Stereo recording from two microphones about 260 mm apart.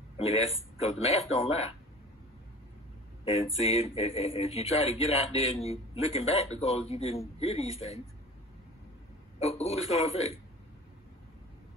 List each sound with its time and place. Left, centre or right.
0.7 s speech: left
3.3 s speech: left
9.4 s speech: left